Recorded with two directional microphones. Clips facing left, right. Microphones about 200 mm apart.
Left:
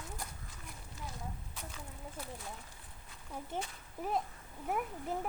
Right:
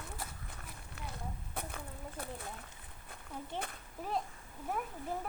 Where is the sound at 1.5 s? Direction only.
55° right (ahead or behind).